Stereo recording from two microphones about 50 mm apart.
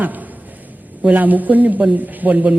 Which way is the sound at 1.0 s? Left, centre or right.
Right.